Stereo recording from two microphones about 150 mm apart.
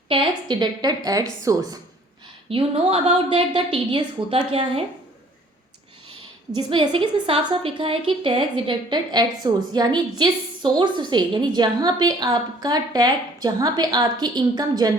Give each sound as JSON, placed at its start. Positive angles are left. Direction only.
{"t": 0.1, "sound": "a woman's voice", "side_deg": -35}
{"t": 2.5, "sound": "a woman's voice", "side_deg": -40}
{"t": 6.6, "sound": "a woman's voice", "side_deg": -35}